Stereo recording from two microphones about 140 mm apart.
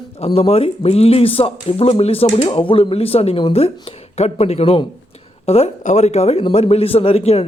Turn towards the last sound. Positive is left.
turn(degrees=45)  # may be behind; listen again after turning